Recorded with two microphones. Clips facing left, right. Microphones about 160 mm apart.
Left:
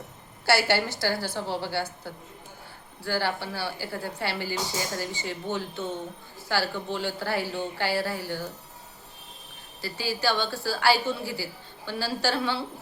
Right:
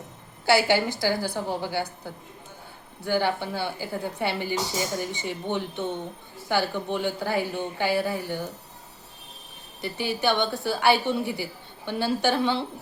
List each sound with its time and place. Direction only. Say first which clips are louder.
0.4 s a woman's voice: right 3 dB; 15° right (ahead or behind)
9.8 s speech: right 2 dB; 20° right (ahead or behind)